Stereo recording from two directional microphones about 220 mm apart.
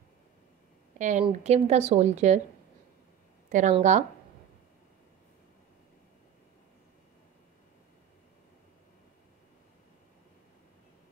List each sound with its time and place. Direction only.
0.9 s speech: 35° right (ahead or behind)
3.4 s speech: 35° right (ahead or behind)